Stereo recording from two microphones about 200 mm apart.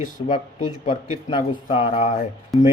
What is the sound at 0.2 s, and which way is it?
Speech, 25° left (ahead or behind).